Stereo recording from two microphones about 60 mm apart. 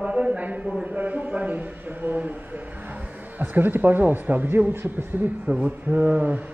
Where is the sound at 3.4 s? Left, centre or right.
Right.